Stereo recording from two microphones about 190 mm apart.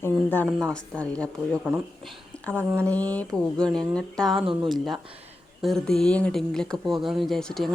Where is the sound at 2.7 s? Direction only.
15° right (ahead or behind).